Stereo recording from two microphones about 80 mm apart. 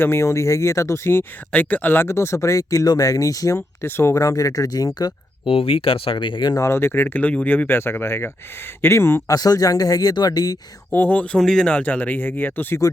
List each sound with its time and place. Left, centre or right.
0.0 s speech: left
1.5 s speech: left
3.8 s speech: left
4.2 s speech: left
6.1 s speech: left
6.7 s speech: left
9.2 s speech: left
10.9 s speech: left
11.3 s speech: centre
11.7 s speech: centre